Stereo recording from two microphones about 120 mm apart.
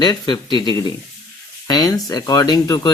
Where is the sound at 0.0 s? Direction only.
40° left (ahead or behind).